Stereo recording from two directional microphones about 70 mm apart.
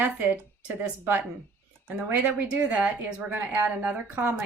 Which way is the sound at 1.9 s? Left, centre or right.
Right.